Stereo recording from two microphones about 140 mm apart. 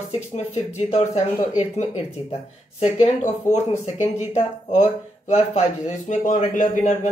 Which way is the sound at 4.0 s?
55° left (ahead or behind).